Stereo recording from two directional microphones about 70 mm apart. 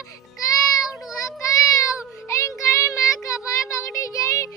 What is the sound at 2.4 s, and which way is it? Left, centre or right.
Child singing, left.